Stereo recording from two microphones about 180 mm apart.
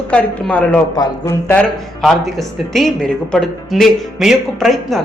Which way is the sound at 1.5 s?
5° left (ahead or behind).